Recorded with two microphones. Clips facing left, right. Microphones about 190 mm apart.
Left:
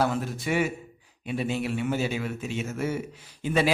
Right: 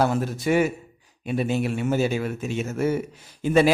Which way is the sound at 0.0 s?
45° right (ahead or behind).